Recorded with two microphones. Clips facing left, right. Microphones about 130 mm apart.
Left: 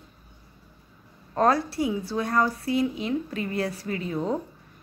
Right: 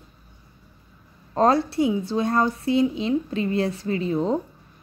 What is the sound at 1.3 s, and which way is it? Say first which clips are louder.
A woman's voice: right 3 dB; 25° right (ahead or behind).